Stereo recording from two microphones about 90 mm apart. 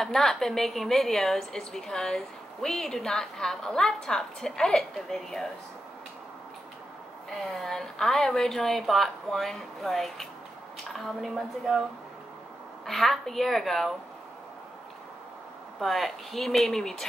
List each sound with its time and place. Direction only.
0.0 s a woman's voice: 5° left (ahead or behind)
7.5 s a woman's voice: 5° left (ahead or behind)
12.8 s a woman's voice: 5° left (ahead or behind)
15.8 s a woman's voice: centre (ahead or behind)